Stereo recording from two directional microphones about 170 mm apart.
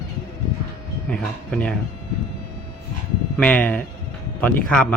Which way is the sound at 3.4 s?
10° left (ahead or behind).